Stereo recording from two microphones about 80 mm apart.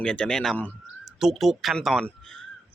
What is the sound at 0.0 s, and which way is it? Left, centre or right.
Speech, centre.